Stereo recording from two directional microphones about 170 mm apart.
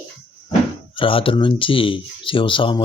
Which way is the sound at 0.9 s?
30° left (ahead or behind).